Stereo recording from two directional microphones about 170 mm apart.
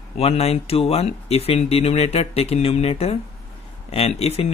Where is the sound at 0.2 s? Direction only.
35° left (ahead or behind).